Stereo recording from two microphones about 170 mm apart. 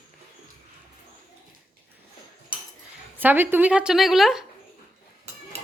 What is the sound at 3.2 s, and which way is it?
Speech, 10° right (ahead or behind).